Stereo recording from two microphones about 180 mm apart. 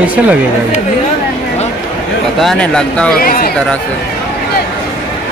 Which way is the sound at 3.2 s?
50° left (ahead or behind).